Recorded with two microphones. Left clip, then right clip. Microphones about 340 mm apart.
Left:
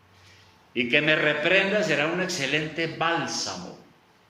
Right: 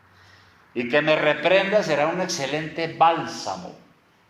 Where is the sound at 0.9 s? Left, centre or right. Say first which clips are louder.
Right 3 dB; centre.